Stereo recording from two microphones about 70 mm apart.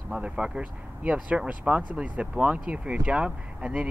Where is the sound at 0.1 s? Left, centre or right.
Centre.